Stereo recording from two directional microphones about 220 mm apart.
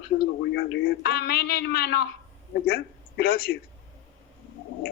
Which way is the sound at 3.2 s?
45° left (ahead or behind).